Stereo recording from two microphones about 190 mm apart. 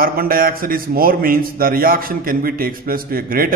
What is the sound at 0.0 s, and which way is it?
A man's voice, 50° right (ahead or behind).